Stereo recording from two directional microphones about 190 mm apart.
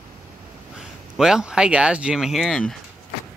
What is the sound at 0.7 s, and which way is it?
Speech, 5° right (ahead or behind).